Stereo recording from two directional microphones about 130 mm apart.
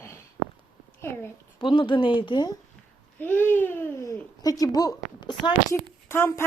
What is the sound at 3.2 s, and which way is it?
Babbling, 15° left (ahead or behind).